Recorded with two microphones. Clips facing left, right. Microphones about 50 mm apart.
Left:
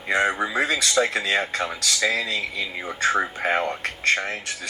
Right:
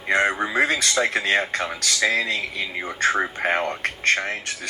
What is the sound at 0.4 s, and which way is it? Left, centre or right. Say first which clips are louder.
Speech: right 2 dB; right.